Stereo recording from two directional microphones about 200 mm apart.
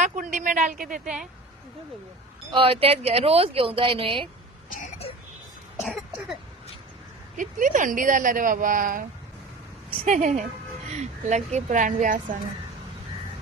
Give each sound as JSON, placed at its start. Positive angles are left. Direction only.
{"t": 0.0, "sound": "speech", "side_deg": -40}
{"t": 1.0, "sound": "speech", "side_deg": -5}
{"t": 2.5, "sound": "speech", "side_deg": -25}
{"t": 5.1, "sound": "a sound", "side_deg": 30}
{"t": 5.8, "sound": "cough", "side_deg": -5}
{"t": 7.3, "sound": "speech", "side_deg": -40}